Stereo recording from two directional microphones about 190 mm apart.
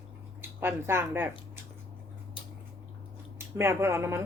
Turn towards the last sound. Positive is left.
turn(degrees=-15)  # may be behind; listen again after turning